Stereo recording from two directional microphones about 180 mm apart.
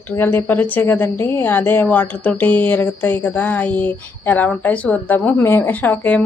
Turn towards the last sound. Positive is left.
turn(degrees=10)  # may be behind; listen again after turning